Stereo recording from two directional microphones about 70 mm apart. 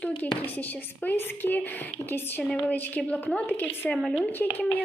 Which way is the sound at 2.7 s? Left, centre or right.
Left.